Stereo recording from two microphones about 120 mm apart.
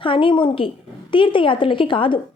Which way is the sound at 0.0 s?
45° left (ahead or behind).